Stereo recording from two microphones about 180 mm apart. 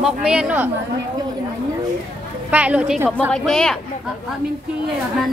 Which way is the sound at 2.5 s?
10° right (ahead or behind).